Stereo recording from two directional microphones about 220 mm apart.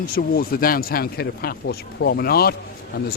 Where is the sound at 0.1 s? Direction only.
40° left (ahead or behind).